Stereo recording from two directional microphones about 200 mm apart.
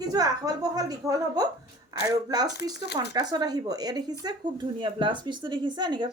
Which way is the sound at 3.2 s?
20° right (ahead or behind).